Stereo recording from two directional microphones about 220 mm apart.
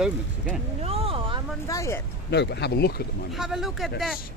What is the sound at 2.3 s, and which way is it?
Speech, 50° left (ahead or behind).